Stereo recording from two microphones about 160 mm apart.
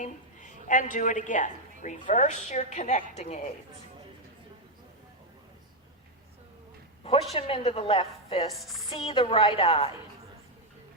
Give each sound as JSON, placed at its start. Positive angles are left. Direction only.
{"t": 0.0, "sound": "a woman's voice", "side_deg": 50}
{"t": 7.0, "sound": "a woman's voice", "side_deg": 40}
{"t": 8.5, "sound": "a woman's voice", "side_deg": 0}
{"t": 8.9, "sound": "a woman's voice", "side_deg": 35}